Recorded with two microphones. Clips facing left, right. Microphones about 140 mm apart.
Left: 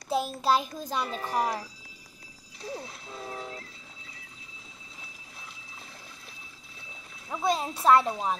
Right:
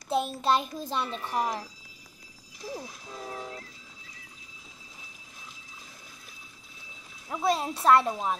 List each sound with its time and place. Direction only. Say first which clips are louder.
0.1 s speech: even; centre (ahead or behind)
1.0 s speech: left 3 dB; 40° left (ahead or behind)
2.7 s speech: even; 15° right (ahead or behind)
7.2 s speech: right 1 dB; centre (ahead or behind)